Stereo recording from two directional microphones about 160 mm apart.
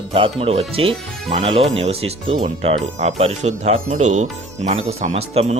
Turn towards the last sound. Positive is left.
turn(degrees=-40)  # may be behind; listen again after turning